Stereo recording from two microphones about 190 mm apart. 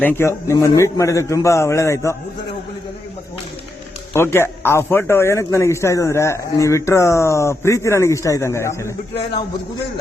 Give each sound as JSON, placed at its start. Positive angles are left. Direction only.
{"t": 0.0, "sound": "speech", "side_deg": 10}
{"t": 4.1, "sound": "speech", "side_deg": 15}